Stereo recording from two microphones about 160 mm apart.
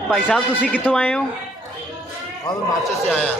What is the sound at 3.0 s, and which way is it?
Speech, 5° left (ahead or behind).